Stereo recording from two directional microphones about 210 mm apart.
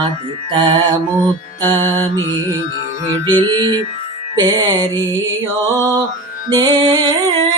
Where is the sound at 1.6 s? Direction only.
10° left (ahead or behind).